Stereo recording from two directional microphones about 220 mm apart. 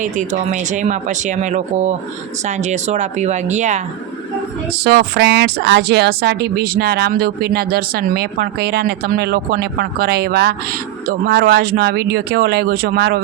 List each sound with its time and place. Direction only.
0.0 s speech: 35° right (ahead or behind)
4.8 s speech: 45° right (ahead or behind)